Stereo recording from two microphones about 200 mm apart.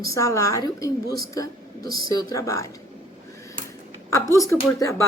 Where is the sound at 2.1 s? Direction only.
15° left (ahead or behind).